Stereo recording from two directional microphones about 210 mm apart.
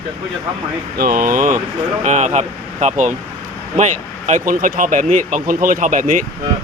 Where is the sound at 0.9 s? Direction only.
45° right (ahead or behind).